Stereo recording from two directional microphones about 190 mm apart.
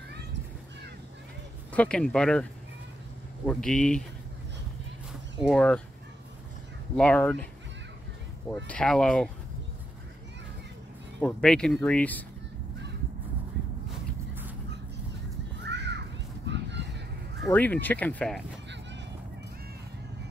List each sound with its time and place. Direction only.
1.7 s speech: 5° left (ahead or behind)
3.4 s speech: 5° left (ahead or behind)
5.5 s speech: 5° left (ahead or behind)
7.0 s speech: 5° left (ahead or behind)
8.6 s speech: 5° left (ahead or behind)
11.1 s speech: 5° left (ahead or behind)
15.6 s children playing: 65° right (ahead or behind)
16.4 s a sound: 65° right (ahead or behind)
17.5 s speech: 10° left (ahead or behind)